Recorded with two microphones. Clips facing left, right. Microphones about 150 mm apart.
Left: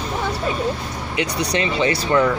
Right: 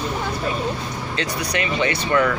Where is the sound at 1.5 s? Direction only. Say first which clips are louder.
Left 2 dB; 30° left (ahead or behind).